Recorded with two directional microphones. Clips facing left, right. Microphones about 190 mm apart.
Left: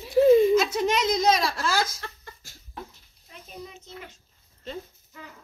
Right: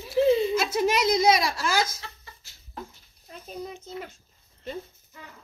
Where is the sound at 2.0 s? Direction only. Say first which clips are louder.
Left 4 dB; 50° left (ahead or behind).